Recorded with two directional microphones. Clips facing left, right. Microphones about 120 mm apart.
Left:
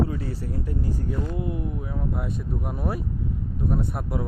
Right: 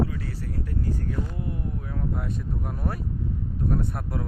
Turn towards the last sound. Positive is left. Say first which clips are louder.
# left 1 dB
turn(degrees=10)  # may be behind; listen again after turning